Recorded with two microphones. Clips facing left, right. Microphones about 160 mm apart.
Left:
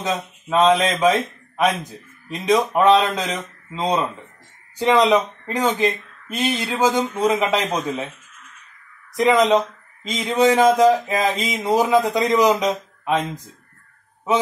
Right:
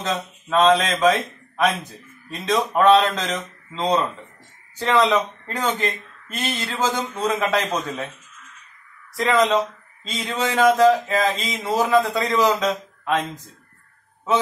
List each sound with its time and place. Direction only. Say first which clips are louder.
0.0 s a man's voice: left 1 dB; 15° left (ahead or behind)
9.1 s a man's voice: left 3 dB; 15° left (ahead or behind)